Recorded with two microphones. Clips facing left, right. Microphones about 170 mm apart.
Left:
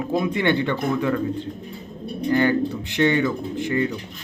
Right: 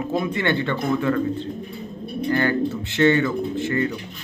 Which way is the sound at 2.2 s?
15° left (ahead or behind).